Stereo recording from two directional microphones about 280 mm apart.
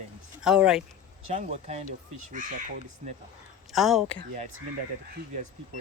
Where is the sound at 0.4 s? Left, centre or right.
Centre.